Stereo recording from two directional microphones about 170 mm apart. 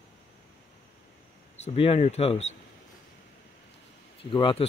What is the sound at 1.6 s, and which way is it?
Speech, 35° left (ahead or behind).